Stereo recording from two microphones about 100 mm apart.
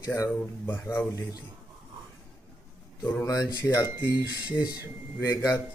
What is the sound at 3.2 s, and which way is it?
Speech, 35° left (ahead or behind).